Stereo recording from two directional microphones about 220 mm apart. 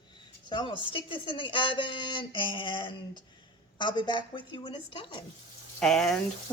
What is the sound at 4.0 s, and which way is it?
Speech, 20° left (ahead or behind).